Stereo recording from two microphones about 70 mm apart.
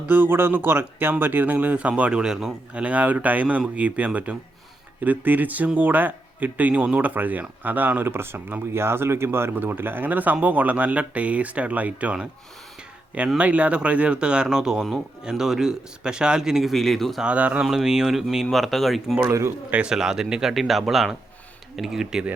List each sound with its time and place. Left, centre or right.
0.1 s speech: right
13.4 s speech: centre
17.2 s speech: right
17.6 s speech: centre
19.2 s a man's voice: right
19.9 s speech: centre